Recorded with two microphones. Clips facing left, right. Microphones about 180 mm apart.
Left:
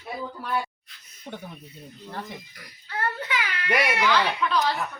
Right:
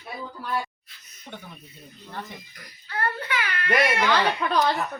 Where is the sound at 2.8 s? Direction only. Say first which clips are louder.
Right 1 dB; 20° left (ahead or behind).